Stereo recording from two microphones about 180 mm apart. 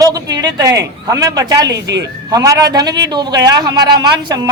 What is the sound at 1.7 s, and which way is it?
Speech, 70° right (ahead or behind).